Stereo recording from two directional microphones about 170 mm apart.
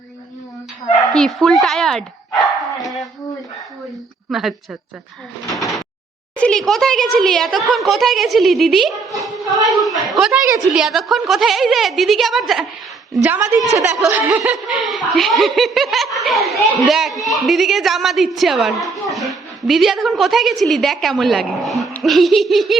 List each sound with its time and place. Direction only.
1.1 s speech: centre (ahead or behind)
2.4 s bow-wow: centre (ahead or behind)
4.3 s speech: centre (ahead or behind)
6.3 s a sound: 5° left (ahead or behind)
7.2 s speech: centre (ahead or behind)
9.1 s a sound: centre (ahead or behind)
9.5 s speech: 20° right (ahead or behind)
9.8 s a woman's voice: centre (ahead or behind)
13.7 s a woman's voice: 20° right (ahead or behind); by 22.8 s centre (ahead or behind)